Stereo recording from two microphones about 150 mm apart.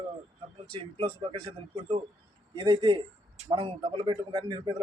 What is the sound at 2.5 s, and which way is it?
A man's voice, 30° right (ahead or behind).